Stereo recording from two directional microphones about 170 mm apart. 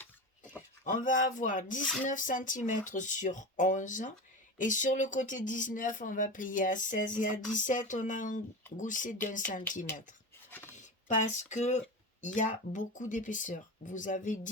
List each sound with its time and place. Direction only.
0.9 s speech: 50° left (ahead or behind)
10.5 s a sound: 15° left (ahead or behind)
11.1 s speech: 45° left (ahead or behind)